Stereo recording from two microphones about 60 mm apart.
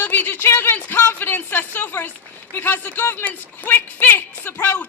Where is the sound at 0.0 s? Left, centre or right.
Left.